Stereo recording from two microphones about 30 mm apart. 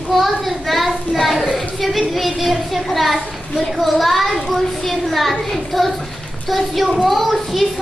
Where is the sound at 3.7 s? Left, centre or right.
Centre.